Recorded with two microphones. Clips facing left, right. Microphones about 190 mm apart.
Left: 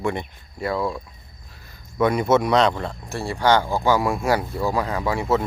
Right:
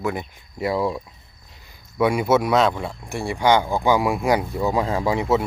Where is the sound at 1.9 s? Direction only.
10° right (ahead or behind).